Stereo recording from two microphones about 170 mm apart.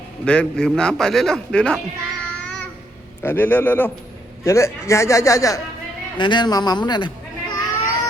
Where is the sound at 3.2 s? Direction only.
10° left (ahead or behind).